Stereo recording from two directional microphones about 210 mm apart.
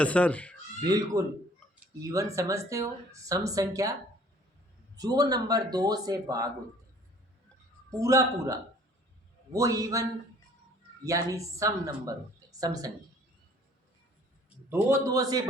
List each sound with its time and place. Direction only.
0.0 s speech: 5° left (ahead or behind)
0.9 s speech: 15° right (ahead or behind)
4.9 s speech: 15° right (ahead or behind)
7.9 s speech: 15° right (ahead or behind)
14.7 s speech: 15° right (ahead or behind)